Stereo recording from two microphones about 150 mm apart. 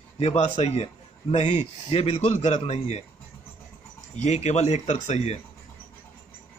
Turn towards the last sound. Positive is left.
turn(degrees=45)  # may be behind; listen again after turning